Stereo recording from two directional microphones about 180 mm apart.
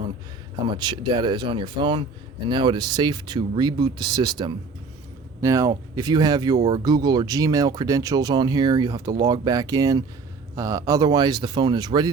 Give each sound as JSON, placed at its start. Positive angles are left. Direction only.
{"t": 0.8, "sound": "speech", "side_deg": -25}